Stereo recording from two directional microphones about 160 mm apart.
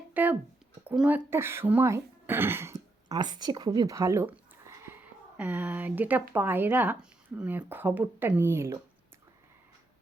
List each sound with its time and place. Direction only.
0.1 s speech: 10° right (ahead or behind)
3.2 s speech: 25° right (ahead or behind)